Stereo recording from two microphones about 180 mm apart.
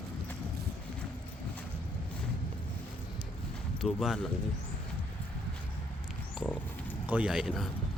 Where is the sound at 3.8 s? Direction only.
Centre (ahead or behind).